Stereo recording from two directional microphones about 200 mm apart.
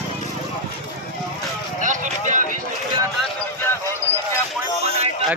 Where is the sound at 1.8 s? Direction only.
40° right (ahead or behind).